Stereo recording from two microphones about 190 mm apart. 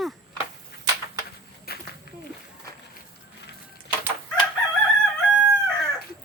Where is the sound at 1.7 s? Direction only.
55° left (ahead or behind).